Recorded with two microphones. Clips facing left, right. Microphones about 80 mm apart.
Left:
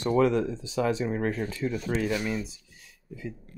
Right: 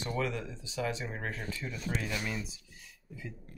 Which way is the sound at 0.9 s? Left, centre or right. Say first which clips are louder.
Left 10 dB; left.